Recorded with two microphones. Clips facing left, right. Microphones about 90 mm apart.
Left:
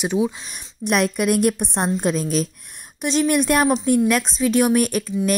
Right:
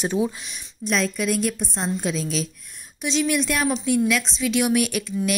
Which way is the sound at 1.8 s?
45° left (ahead or behind).